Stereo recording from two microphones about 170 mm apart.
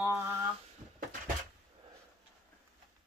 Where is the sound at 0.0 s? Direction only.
15° right (ahead or behind).